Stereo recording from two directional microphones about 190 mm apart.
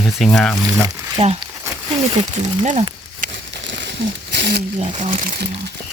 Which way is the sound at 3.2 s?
70° right (ahead or behind).